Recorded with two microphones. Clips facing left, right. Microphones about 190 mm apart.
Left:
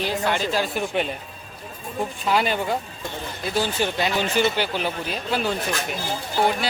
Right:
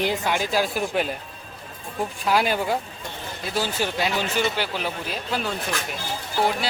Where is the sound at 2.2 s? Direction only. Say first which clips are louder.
Right 1 dB; 5° right (ahead or behind).